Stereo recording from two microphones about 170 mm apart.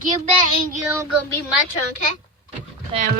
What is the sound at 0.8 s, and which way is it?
Child singing, 15° right (ahead or behind).